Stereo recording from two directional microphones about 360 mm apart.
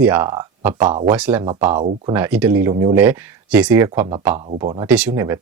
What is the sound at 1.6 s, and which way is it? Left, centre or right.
Speech, centre.